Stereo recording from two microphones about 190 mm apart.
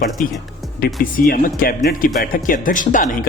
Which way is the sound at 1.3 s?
50° left (ahead or behind).